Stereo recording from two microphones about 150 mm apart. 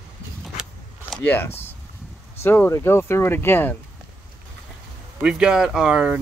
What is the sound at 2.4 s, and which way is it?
Speech, 15° left (ahead or behind).